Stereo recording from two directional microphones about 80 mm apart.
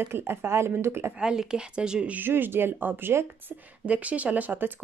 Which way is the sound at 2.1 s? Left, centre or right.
Right.